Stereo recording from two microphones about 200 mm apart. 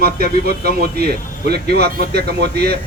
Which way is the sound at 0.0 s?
50° right (ahead or behind).